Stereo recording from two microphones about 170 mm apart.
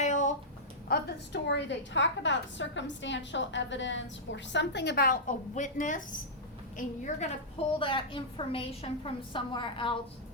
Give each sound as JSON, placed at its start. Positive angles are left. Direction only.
{"t": 0.0, "sound": "a sound", "side_deg": 45}
{"t": 0.9, "sound": "a woman's voice", "side_deg": 80}
{"t": 7.8, "sound": "a woman's voice", "side_deg": 30}